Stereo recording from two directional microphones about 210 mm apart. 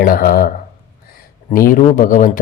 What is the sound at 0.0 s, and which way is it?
Speech, 45° left (ahead or behind).